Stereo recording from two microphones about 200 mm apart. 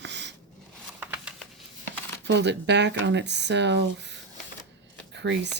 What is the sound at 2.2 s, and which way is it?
Speech, 60° right (ahead or behind).